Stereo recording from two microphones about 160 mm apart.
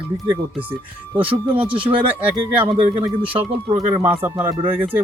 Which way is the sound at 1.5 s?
35° right (ahead or behind).